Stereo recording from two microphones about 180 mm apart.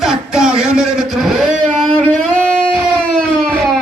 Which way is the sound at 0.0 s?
5° right (ahead or behind).